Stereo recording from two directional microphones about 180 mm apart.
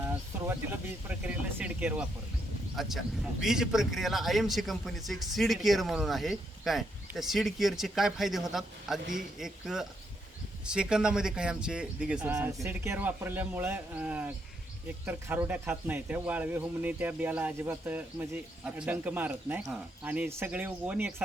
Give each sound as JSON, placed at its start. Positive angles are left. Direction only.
{"t": 0.0, "sound": "a man's voice", "side_deg": -10}